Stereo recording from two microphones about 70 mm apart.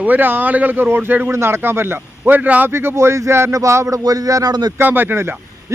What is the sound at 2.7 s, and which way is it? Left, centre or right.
A man's voice, right.